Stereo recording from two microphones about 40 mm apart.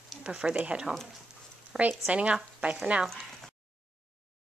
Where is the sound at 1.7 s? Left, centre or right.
Right.